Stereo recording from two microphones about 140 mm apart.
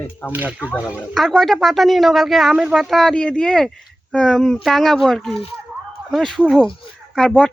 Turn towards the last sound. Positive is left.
turn(degrees=5)  # may be behind; listen again after turning